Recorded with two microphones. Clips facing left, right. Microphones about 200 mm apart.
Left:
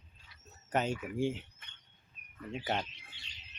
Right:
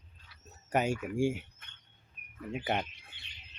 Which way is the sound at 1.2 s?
10° right (ahead or behind).